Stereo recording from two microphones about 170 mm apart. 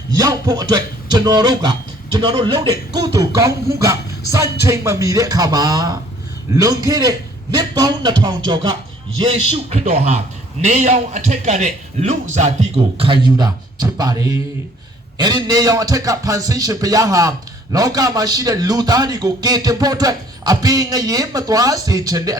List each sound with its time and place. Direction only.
0.2 s a man's voice: 20° right (ahead or behind)